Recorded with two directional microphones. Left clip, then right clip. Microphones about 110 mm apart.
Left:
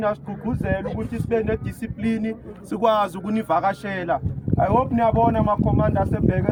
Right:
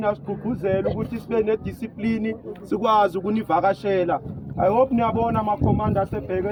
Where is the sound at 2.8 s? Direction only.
40° left (ahead or behind).